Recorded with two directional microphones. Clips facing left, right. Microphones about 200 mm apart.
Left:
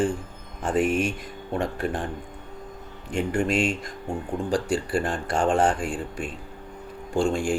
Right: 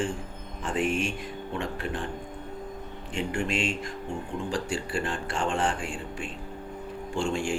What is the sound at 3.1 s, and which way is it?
Speech, 40° left (ahead or behind).